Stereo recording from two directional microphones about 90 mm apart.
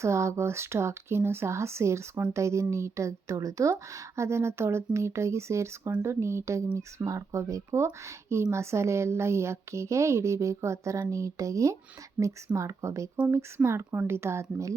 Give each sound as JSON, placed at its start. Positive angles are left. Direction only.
{"t": 0.0, "sound": "speech", "side_deg": -30}